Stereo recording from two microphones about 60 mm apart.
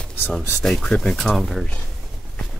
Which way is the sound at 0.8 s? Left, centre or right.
Centre.